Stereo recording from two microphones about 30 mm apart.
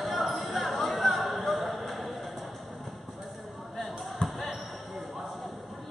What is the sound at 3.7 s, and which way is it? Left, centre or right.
Basketball bounce, centre.